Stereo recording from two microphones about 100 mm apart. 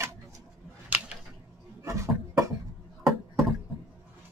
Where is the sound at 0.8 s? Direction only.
15° right (ahead or behind).